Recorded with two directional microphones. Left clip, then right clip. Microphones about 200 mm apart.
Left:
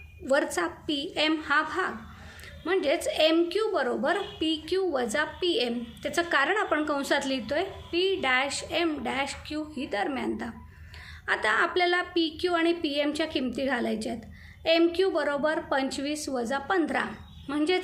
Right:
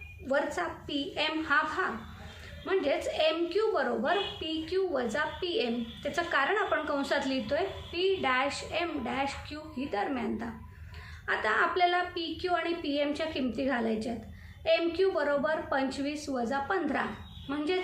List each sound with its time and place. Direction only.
0.3 s a woman's voice: 50° left (ahead or behind)